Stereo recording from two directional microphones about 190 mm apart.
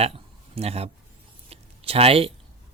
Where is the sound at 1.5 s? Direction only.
30° right (ahead or behind).